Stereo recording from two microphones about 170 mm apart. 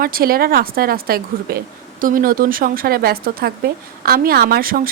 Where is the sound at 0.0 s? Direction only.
60° right (ahead or behind).